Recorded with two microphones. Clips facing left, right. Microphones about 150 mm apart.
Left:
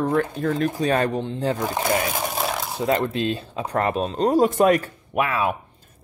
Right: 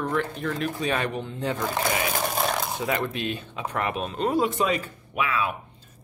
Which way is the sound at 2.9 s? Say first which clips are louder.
Left 8 dB; 30° left (ahead or behind).